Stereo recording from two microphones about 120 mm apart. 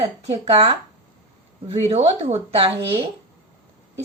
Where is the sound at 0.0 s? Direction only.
50° right (ahead or behind).